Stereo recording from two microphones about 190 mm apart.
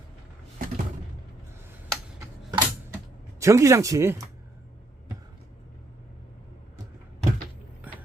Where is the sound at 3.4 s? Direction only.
15° right (ahead or behind).